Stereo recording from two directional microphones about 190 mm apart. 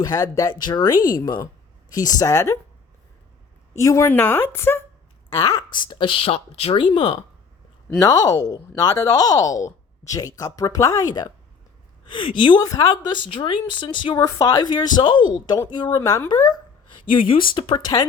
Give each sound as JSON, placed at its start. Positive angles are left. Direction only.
{"t": 0.0, "sound": "speech", "side_deg": 15}
{"t": 0.9, "sound": "speech", "side_deg": 45}
{"t": 1.2, "sound": "speech", "side_deg": 20}
{"t": 3.8, "sound": "speech", "side_deg": 15}